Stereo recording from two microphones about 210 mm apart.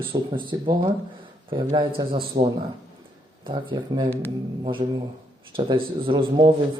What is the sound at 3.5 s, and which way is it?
Speech, 20° right (ahead or behind).